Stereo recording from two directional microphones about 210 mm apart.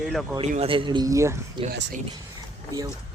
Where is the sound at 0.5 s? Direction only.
25° right (ahead or behind).